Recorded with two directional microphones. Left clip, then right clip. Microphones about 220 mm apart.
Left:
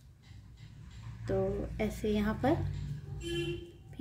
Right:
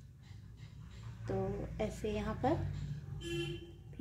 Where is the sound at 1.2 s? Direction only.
15° left (ahead or behind).